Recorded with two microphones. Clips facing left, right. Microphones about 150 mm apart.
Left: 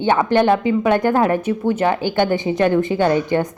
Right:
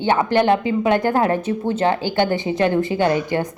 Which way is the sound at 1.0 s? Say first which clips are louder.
Left 2 dB; 15° left (ahead or behind).